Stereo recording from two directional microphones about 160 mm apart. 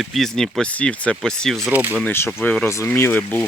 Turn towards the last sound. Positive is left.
turn(degrees=10)  # may be behind; listen again after turning